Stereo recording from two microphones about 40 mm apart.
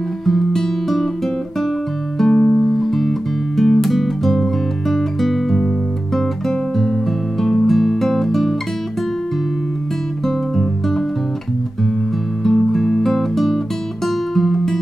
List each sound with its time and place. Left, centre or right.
0.2 s music: centre
2.1 s music: centre
2.4 s music: left
2.7 s guitar: centre
4.8 s music: centre
10.2 s music: centre
12.4 s music: centre